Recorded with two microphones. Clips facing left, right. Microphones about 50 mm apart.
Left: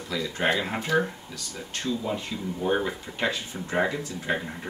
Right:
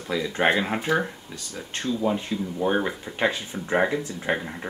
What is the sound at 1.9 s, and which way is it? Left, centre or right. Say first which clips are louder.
Speech: right 5 dB; right.